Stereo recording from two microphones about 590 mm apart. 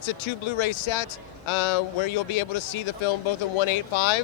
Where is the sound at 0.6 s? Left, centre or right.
Left.